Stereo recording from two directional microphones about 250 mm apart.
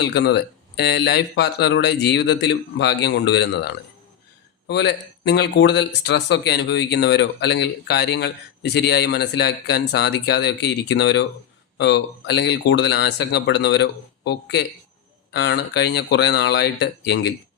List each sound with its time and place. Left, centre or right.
0.0 s speech: left